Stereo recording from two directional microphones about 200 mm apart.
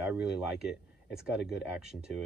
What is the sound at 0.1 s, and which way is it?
Speech, 5° right (ahead or behind).